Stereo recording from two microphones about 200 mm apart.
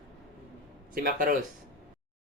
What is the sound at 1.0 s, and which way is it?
Speech, 40° right (ahead or behind).